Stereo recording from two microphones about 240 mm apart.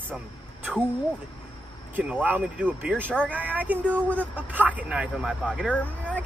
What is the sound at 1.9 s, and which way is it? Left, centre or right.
Speech, centre.